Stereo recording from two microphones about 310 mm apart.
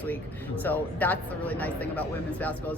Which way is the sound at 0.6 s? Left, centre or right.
Centre.